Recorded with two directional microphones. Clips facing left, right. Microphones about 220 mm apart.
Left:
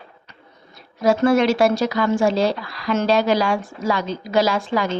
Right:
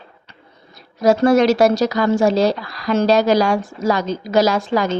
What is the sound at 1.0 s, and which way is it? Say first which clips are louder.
A woman's voice: right 3 dB; 40° right (ahead or behind).